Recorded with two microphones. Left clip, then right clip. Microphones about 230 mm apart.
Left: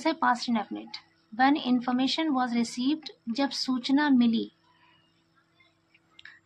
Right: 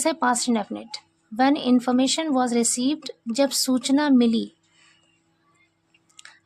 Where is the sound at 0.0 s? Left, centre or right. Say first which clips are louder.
Right 4 dB; right.